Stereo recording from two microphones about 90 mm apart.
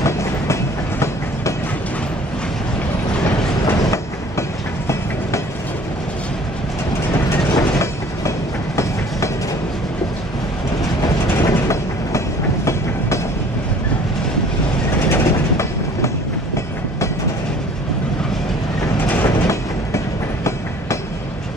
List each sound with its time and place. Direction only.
0.0 s train: 30° left (ahead or behind)
3.6 s train: 35° left (ahead or behind)
7.5 s train: 35° left (ahead or behind)
11.4 s train: 35° left (ahead or behind)
15.0 s train: 30° left (ahead or behind)
19.2 s train: 35° left (ahead or behind)